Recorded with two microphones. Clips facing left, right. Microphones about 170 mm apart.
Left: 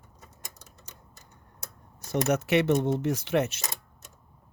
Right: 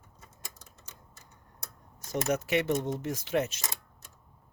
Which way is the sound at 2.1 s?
70° left (ahead or behind).